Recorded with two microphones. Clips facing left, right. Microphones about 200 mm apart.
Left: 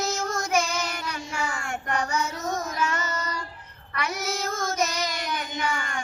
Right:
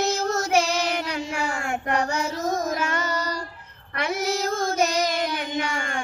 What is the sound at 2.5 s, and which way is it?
Child singing, 45° right (ahead or behind).